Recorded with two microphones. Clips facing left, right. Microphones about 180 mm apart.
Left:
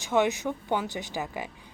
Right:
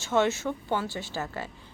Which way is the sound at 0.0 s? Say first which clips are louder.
Even; 15° left (ahead or behind).